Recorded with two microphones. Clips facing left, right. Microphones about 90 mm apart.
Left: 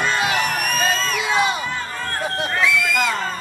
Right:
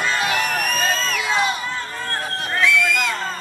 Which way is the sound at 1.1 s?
15° left (ahead or behind).